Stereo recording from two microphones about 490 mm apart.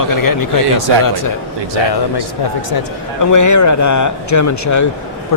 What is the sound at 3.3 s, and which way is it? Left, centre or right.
Speech, left.